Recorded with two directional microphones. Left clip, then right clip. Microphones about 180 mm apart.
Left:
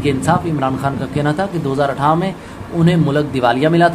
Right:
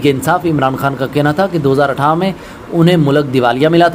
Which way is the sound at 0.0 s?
25° right (ahead or behind).